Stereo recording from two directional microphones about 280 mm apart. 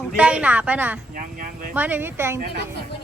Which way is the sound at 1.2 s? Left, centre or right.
Right.